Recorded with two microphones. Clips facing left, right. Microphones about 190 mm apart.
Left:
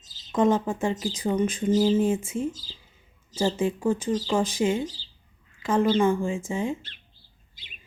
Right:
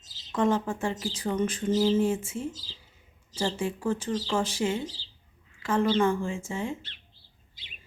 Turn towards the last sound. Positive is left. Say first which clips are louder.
# left 4 dB
turn(degrees=15)  # may be behind; listen again after turning